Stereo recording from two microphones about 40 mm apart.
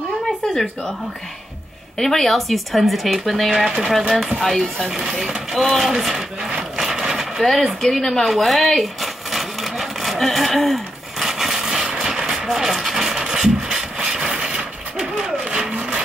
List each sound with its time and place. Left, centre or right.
2.0 s speech: centre
3.5 s speech: centre
4.4 s speech: centre
4.8 s speech: centre
5.5 s speech: centre
5.9 s a sound: centre
7.4 s speech: centre
8.3 s sewing machine: centre
11.2 s vehicle: centre; by 16.0 s right